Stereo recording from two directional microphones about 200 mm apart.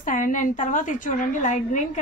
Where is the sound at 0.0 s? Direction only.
40° left (ahead or behind).